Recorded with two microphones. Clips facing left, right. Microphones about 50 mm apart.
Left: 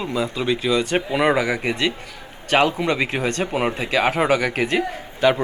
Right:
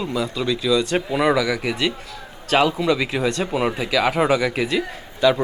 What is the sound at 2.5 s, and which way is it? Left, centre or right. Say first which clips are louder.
A man's voice: even; left.